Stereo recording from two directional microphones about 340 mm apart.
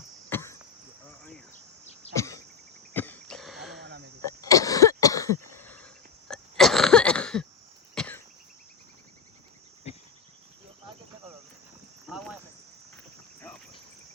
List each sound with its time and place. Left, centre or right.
0.3 s cricket: centre
2.1 s a sound: centre
4.3 s cough: centre
5.5 s cricket: centre
6.3 s cough: centre
12.0 s cricket: centre